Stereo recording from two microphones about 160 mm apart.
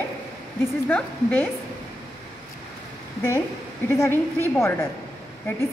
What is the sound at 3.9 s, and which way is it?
Speech, 20° left (ahead or behind).